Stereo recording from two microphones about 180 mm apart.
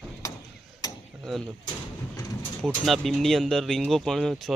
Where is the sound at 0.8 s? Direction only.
20° left (ahead or behind).